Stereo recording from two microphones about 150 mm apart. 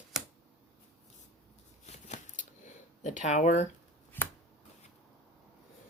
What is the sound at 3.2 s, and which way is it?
Speech, 55° left (ahead or behind).